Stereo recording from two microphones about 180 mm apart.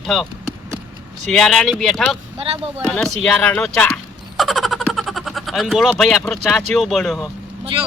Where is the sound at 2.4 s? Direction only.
30° right (ahead or behind).